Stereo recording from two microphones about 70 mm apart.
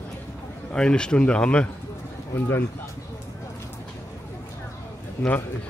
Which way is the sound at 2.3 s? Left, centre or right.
Left.